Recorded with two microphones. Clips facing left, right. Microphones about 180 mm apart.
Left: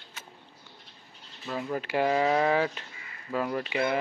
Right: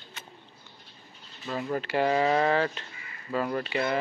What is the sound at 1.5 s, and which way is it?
Speech, 5° left (ahead or behind).